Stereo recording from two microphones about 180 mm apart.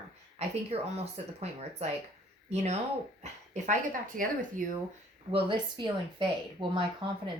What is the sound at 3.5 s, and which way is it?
A woman's voice, 45° right (ahead or behind).